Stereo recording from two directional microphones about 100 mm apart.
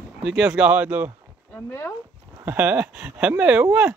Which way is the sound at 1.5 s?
25° left (ahead or behind).